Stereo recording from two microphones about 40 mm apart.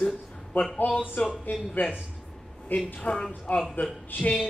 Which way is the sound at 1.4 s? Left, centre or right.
Left.